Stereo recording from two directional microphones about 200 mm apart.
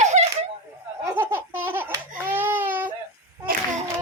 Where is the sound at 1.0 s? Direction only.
10° right (ahead or behind).